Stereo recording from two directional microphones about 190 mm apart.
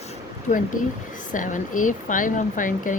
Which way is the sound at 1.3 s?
45° left (ahead or behind).